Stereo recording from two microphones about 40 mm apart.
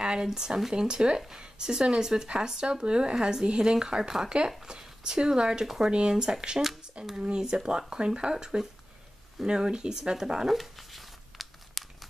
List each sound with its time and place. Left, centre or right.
0.0 s speech: centre
4.6 s speech: centre
10.5 s crumpling: centre